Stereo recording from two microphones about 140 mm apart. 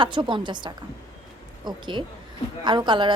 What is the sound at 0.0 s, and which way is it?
Speech, 35° right (ahead or behind).